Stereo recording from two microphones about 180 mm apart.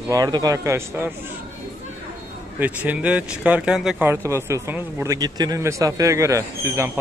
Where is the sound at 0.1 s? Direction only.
20° right (ahead or behind).